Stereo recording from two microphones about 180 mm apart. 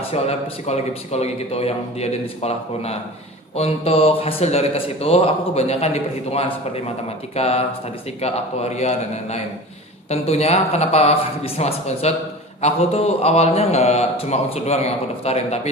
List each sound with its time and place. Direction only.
0.0 s speech: 35° left (ahead or behind)